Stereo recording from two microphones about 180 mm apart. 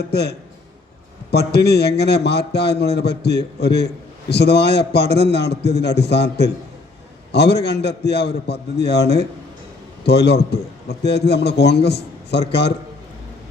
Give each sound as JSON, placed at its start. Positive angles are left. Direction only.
{"t": 0.1, "sound": "a man's voice", "side_deg": 65}